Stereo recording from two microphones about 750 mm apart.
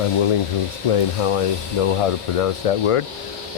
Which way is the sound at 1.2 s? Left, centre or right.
Left.